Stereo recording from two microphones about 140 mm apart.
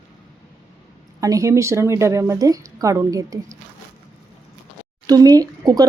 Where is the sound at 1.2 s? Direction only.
25° right (ahead or behind).